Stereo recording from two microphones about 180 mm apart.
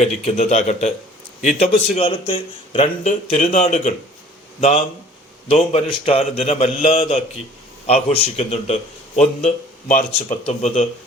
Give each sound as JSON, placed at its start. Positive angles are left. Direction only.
{"t": 0.3, "sound": "a man's voice", "side_deg": 35}